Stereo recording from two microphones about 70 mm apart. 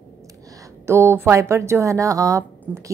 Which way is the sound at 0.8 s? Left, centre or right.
Right.